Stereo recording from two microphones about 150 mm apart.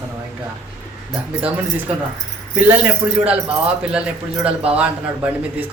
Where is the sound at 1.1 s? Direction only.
10° right (ahead or behind).